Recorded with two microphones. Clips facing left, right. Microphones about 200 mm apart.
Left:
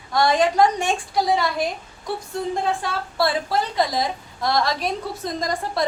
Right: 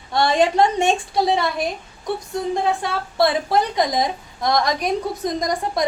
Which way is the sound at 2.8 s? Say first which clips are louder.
Right 3 dB; 20° right (ahead or behind).